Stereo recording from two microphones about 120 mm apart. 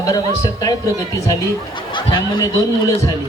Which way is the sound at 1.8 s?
40° left (ahead or behind).